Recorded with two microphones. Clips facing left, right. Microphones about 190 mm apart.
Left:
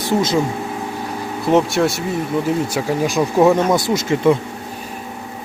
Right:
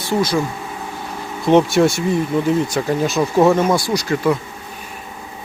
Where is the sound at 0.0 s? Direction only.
20° left (ahead or behind).